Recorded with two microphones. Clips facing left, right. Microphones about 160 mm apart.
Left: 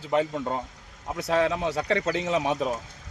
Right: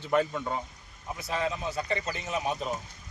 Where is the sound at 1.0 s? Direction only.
85° left.